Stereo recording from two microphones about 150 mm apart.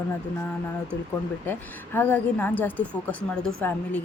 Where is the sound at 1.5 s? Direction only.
10° left (ahead or behind).